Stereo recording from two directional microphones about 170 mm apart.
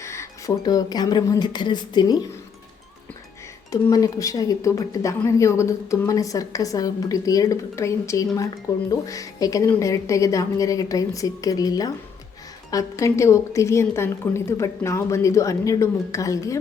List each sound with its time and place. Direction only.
0.0 s speech: 15° left (ahead or behind)
3.7 s a woman's voice: 20° left (ahead or behind)